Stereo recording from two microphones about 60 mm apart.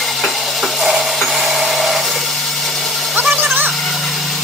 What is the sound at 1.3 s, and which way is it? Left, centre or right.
Hair dryer, centre.